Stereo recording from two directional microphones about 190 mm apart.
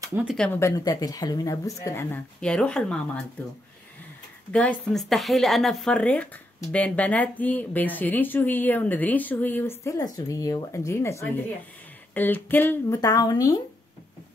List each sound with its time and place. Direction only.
0.0 s a sound: 15° right (ahead or behind)
0.6 s speech: 15° left (ahead or behind)
4.5 s speech: 5° left (ahead or behind)